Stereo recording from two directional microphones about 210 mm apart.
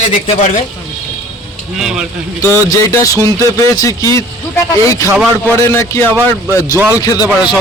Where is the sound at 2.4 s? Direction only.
15° left (ahead or behind).